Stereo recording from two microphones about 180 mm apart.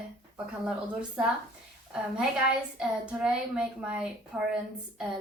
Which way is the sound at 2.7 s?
5° right (ahead or behind).